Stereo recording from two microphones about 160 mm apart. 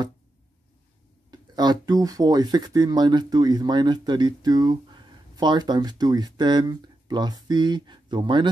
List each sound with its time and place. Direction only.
1.3 s speech: 25° right (ahead or behind)